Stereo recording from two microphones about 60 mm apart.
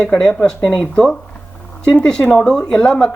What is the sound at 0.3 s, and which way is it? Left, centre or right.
Speech, centre.